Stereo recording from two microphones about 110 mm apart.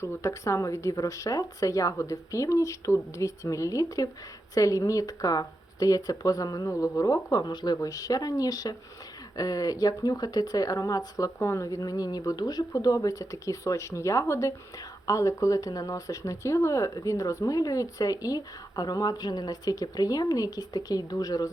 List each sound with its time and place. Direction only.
0.0 s speech: 25° left (ahead or behind)